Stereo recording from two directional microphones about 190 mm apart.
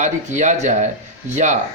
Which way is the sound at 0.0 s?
40° right (ahead or behind).